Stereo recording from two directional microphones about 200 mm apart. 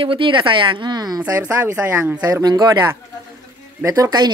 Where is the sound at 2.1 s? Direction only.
20° right (ahead or behind).